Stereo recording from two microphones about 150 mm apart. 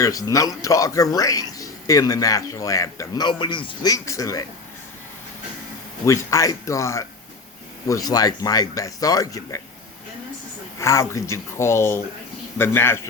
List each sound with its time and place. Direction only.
0.0 s speech: 20° left (ahead or behind)
3.9 s speech: 20° left (ahead or behind)
6.1 s speech: 20° left (ahead or behind)
10.8 s a man's voice: 20° left (ahead or behind)